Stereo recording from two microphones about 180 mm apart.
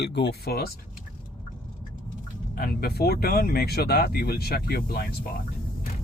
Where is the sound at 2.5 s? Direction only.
60° left (ahead or behind).